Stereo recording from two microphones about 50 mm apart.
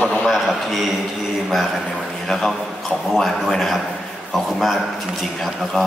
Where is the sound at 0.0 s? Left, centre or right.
Centre.